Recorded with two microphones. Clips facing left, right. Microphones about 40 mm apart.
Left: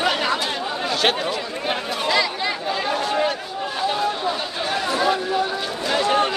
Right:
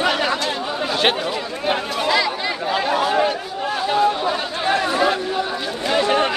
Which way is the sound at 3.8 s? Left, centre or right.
Centre.